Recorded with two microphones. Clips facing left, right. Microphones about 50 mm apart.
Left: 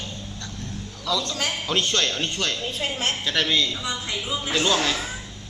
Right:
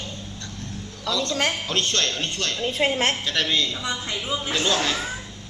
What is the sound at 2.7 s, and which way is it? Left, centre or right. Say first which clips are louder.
Speech: right 5 dB; right.